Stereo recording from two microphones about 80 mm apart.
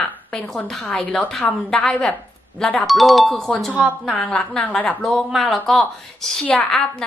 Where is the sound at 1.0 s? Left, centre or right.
Centre.